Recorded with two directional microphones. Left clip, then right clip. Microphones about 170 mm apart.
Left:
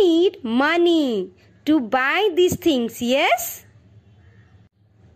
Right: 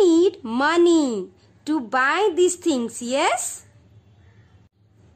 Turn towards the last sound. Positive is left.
turn(degrees=15)  # may be behind; listen again after turning